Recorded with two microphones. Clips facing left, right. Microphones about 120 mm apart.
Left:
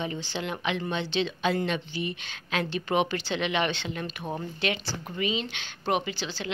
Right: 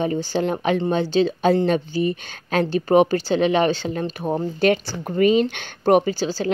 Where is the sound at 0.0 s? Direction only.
40° right (ahead or behind).